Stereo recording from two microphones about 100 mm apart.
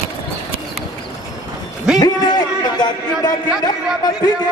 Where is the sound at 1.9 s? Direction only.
40° left (ahead or behind).